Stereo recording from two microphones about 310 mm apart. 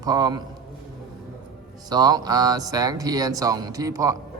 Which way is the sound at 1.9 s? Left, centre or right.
Centre.